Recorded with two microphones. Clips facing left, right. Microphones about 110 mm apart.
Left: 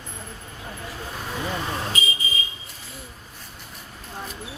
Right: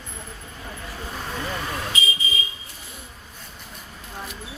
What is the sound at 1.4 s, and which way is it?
Vehicle, 25° left (ahead or behind).